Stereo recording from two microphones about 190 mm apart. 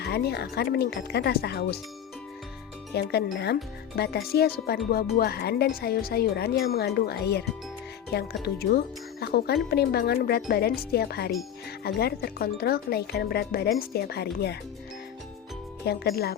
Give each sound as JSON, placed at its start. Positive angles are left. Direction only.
{"t": 0.0, "sound": "speech", "side_deg": 55}
{"t": 2.9, "sound": "speech", "side_deg": 55}
{"t": 15.9, "sound": "speech", "side_deg": 55}